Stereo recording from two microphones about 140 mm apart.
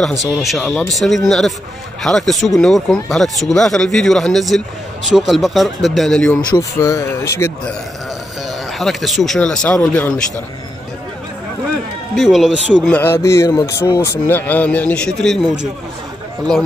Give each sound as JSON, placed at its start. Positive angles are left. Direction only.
{"t": 0.2, "sound": "a man's voice", "side_deg": 0}
{"t": 6.5, "sound": "a man's voice", "side_deg": 20}
{"t": 8.5, "sound": "a man's voice", "side_deg": 0}
{"t": 12.2, "sound": "a man's voice", "side_deg": 0}
{"t": 12.8, "sound": "a man's voice", "side_deg": 15}